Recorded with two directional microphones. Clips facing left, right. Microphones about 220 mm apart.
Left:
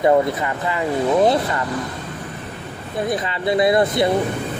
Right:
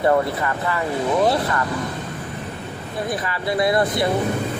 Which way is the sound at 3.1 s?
20° left (ahead or behind).